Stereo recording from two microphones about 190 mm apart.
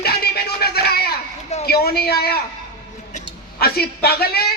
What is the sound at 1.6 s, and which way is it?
Speech, 55° left (ahead or behind).